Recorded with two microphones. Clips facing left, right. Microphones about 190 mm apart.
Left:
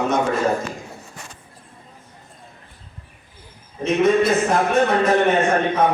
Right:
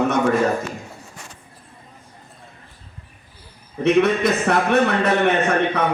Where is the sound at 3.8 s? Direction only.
65° right (ahead or behind).